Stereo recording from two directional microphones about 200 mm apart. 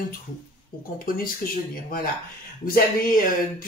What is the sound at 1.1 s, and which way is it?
Speech, 45° left (ahead or behind).